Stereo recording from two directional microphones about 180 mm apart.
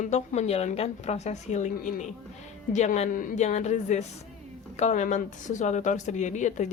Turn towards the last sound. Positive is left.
turn(degrees=40)  # may be behind; listen again after turning